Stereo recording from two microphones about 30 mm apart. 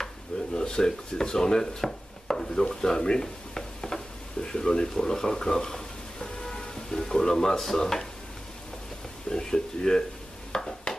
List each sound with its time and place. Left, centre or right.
0.6 s speech: left
9.3 s speech: left
10.5 s a sound: left